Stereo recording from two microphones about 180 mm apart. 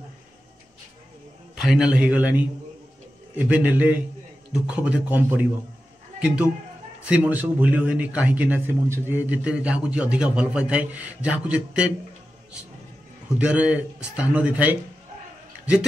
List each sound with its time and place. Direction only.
1.5 s a man's voice: 5° right (ahead or behind)
13.4 s speech: 5° right (ahead or behind)